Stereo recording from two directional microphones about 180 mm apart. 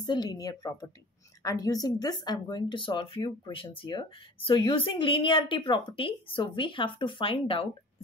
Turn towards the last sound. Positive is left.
turn(degrees=30)  # may be behind; listen again after turning